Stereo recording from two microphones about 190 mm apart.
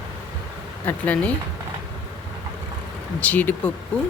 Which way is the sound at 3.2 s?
10° left (ahead or behind).